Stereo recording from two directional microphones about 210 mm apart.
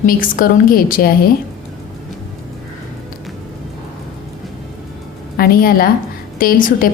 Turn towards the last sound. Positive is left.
turn(degrees=40)  # may be behind; listen again after turning